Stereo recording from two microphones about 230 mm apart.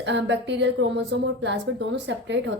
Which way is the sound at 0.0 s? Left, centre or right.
Right.